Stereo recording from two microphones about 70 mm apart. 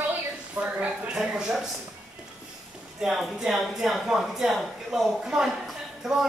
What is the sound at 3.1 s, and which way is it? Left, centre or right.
A man's voice, centre.